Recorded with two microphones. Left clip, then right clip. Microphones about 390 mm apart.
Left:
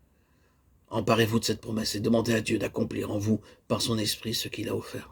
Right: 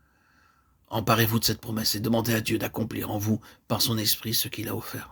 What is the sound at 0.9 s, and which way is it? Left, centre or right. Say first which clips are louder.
Speech: even; right.